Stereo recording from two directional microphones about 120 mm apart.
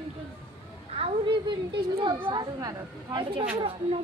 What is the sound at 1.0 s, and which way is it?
A woman's voice, 45° right (ahead or behind).